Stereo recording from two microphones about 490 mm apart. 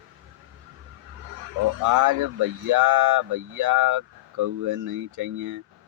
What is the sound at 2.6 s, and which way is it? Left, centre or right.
Speech, right.